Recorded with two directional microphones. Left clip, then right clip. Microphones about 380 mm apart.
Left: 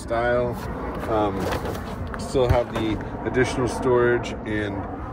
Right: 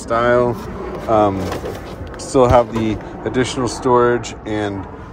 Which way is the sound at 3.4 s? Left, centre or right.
Centre.